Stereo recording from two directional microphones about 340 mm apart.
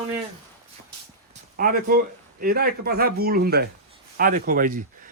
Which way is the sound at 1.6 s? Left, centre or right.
Right.